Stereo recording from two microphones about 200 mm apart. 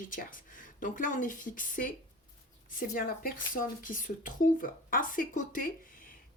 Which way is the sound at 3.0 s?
45° left (ahead or behind).